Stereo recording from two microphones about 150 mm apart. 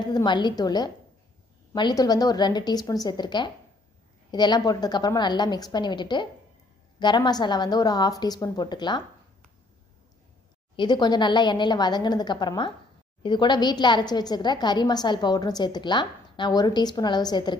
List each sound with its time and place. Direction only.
0.1 s a woman's voice: 30° left (ahead or behind)
10.8 s a woman's voice: 30° left (ahead or behind)